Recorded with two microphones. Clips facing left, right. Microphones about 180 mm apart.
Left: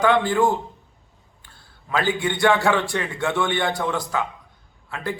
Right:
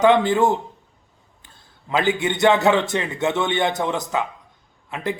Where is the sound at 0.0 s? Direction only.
20° right (ahead or behind).